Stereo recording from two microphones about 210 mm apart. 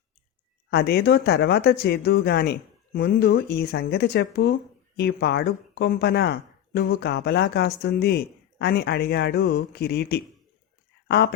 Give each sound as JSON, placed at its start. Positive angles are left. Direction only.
{"t": 0.7, "sound": "speech", "side_deg": 50}